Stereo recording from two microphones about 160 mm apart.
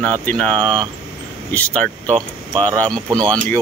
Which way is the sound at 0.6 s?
30° right (ahead or behind).